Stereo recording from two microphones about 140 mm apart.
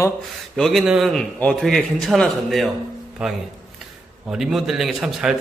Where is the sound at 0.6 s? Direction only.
Centre (ahead or behind).